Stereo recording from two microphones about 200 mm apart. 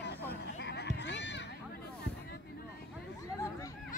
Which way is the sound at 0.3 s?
55° left (ahead or behind).